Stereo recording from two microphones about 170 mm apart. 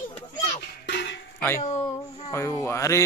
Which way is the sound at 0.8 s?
75° left (ahead or behind).